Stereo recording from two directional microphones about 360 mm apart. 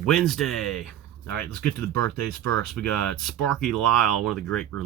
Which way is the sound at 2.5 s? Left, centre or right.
Centre.